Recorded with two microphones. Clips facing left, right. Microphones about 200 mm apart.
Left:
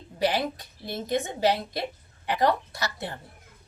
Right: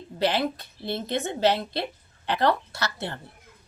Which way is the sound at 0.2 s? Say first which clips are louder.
Right 1 dB; 15° left (ahead or behind).